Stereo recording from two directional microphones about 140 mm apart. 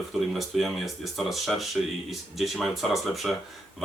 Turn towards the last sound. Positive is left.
turn(degrees=0)  # may be behind; listen again after turning